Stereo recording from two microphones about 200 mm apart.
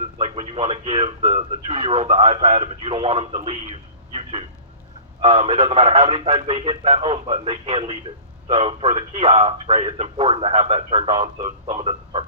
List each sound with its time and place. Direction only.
0.2 s speech: 30° right (ahead or behind)